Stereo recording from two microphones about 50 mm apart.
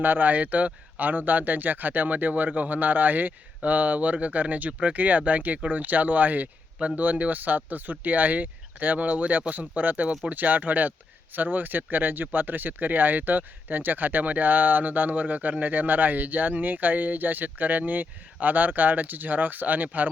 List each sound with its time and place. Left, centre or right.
0.0 s speech: right
6.7 s speech: right